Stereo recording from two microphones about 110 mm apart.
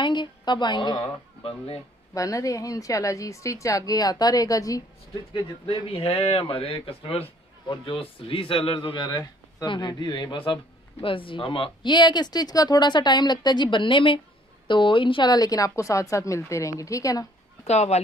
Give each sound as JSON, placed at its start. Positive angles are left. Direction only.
{"t": 0.0, "sound": "speech", "side_deg": 45}
{"t": 2.1, "sound": "a woman's voice", "side_deg": 30}
{"t": 5.3, "sound": "speech", "side_deg": 55}
{"t": 7.6, "sound": "a woman's voice", "side_deg": 50}
{"t": 17.6, "sound": "speech", "side_deg": 85}